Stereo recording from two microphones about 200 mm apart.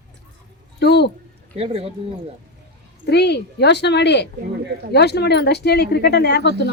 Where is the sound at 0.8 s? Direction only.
55° left (ahead or behind).